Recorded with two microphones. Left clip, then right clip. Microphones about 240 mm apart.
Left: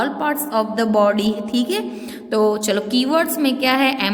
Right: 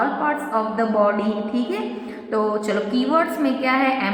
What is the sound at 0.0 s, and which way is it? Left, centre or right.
A woman's voice, left.